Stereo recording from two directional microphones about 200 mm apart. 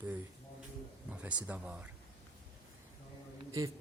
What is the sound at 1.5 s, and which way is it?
Speech, 10° right (ahead or behind).